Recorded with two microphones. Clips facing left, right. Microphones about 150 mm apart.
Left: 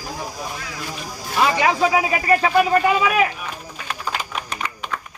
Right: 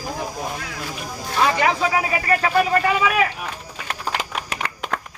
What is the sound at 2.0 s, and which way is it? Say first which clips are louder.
Speech: left 3 dB; 5° left (ahead or behind).